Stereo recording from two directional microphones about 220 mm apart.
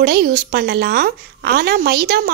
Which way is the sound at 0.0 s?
45° right (ahead or behind).